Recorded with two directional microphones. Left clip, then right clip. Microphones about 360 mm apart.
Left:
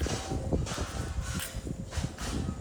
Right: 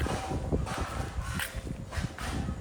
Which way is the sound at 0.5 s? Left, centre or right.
Centre.